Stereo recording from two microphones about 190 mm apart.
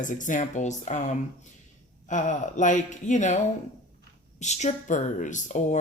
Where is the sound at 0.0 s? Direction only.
40° left (ahead or behind).